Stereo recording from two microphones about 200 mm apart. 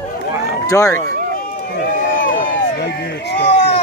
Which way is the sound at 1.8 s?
45° left (ahead or behind).